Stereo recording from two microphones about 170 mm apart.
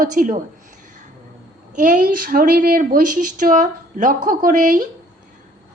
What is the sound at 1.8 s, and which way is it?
A woman's voice, 50° right (ahead or behind).